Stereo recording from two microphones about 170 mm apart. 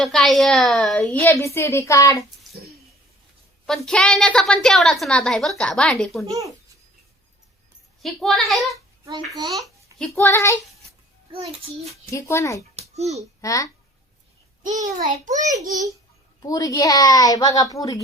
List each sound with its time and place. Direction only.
0.0 s a woman's voice: centre (ahead or behind); by 2.1 s 20° left (ahead or behind)
3.7 s a woman's voice: 5° left (ahead or behind)
8.0 s a woman's voice: centre (ahead or behind)
8.7 s babbling: 25° right (ahead or behind)
9.4 s a child's voice: 20° right (ahead or behind)
10.0 s a woman's voice: 10° left (ahead or behind)
12.1 s a woman's voice: 20° left (ahead or behind)
12.9 s a child's voice: 40° right (ahead or behind)
13.4 s speech: 20° left (ahead or behind)
14.6 s a child's voice: 50° right (ahead or behind)
16.4 s a woman's voice: 20° left (ahead or behind)